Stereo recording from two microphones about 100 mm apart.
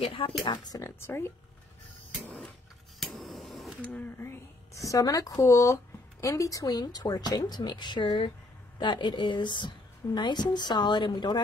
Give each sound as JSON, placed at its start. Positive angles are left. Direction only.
{"t": 0.0, "sound": "speech", "side_deg": 65}
{"t": 0.5, "sound": "a woman's voice", "side_deg": 40}
{"t": 0.8, "sound": "speech", "side_deg": 25}
{"t": 2.2, "sound": "a sound", "side_deg": 10}
{"t": 3.0, "sound": "a sound", "side_deg": 0}
{"t": 3.8, "sound": "a woman's voice", "side_deg": 15}